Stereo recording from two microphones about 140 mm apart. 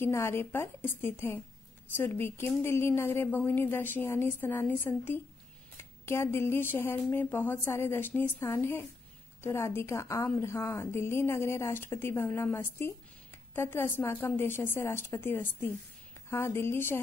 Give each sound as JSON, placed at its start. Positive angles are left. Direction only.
{"t": 0.0, "sound": "a woman's voice", "side_deg": 20}